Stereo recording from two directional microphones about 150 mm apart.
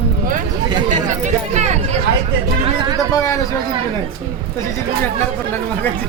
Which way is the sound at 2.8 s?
25° right (ahead or behind).